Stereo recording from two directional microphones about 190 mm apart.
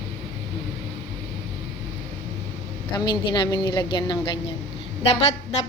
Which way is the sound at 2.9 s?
25° left (ahead or behind).